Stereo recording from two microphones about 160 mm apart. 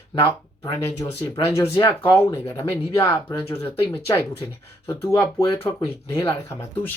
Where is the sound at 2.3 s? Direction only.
15° left (ahead or behind).